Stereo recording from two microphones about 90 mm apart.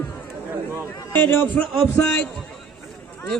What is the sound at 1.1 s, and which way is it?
Speech, 20° left (ahead or behind).